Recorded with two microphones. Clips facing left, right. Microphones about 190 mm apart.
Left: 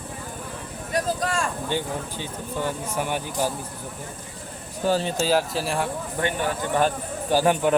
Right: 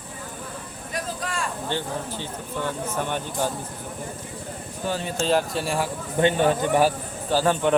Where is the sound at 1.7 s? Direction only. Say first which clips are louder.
Left 1 dB; 10° left (ahead or behind).